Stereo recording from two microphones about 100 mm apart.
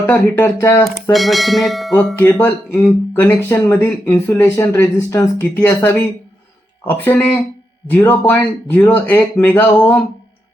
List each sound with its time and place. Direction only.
0.0 s speech: 15° left (ahead or behind)
1.1 s speech: centre (ahead or behind)
2.4 s speech: 20° left (ahead or behind)